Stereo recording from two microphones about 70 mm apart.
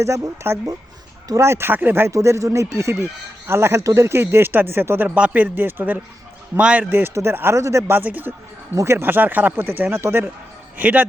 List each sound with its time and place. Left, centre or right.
0.0 s speech: right
2.1 s speech: right
5.0 s a man's voice: centre
7.1 s speech: right
7.9 s a man's voice: right
8.7 s speech: right
10.8 s speech: right